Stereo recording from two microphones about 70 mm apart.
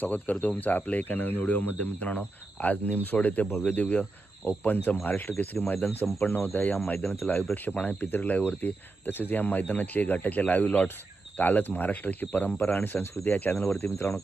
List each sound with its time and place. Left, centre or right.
0.0 s speech: left